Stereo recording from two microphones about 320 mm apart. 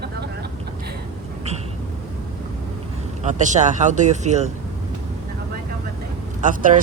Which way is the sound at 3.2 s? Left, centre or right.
Right.